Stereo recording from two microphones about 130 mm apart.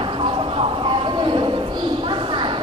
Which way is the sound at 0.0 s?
40° right (ahead or behind).